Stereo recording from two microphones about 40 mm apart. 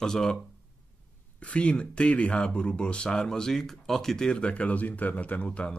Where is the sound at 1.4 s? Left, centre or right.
Left; by 4.3 s centre.